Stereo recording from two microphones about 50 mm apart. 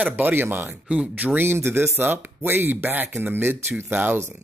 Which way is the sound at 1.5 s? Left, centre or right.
Right.